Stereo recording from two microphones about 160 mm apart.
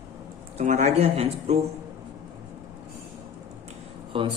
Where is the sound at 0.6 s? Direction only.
50° right (ahead or behind).